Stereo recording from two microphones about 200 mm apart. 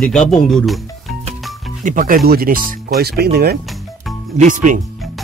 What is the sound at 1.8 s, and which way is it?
Speech, 40° right (ahead or behind).